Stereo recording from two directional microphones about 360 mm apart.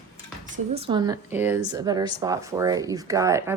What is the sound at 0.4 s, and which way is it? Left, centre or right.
Speech, centre.